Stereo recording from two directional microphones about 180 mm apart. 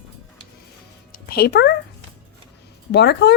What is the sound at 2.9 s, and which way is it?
Speech, 70° left (ahead or behind).